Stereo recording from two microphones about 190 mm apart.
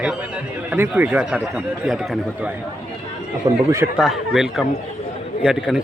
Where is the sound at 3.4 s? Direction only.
15° right (ahead or behind).